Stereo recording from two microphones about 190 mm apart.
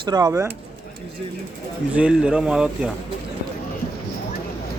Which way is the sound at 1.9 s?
5° right (ahead or behind).